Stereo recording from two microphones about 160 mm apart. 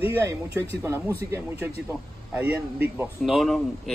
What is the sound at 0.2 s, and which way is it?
Speech, 15° right (ahead or behind).